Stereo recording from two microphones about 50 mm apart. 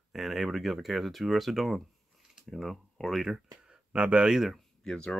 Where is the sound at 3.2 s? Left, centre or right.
Centre.